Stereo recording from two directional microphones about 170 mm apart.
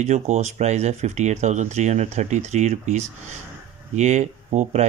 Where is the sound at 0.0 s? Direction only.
45° right (ahead or behind).